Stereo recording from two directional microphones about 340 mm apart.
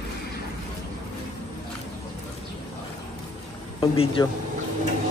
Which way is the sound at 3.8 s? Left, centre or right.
Centre.